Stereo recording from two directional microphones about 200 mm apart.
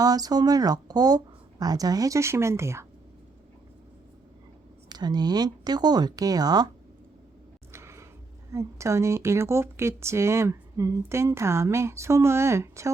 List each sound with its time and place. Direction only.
0.0 s speech: 20° right (ahead or behind)
4.9 s speech: 20° right (ahead or behind)
7.7 s a sound: 15° right (ahead or behind)
8.5 s speech: 15° right (ahead or behind)